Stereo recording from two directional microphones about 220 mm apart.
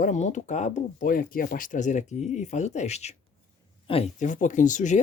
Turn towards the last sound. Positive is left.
turn(degrees=35)  # may be behind; listen again after turning